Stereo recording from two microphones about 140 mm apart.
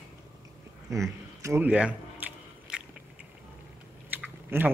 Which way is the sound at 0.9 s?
20° right (ahead or behind).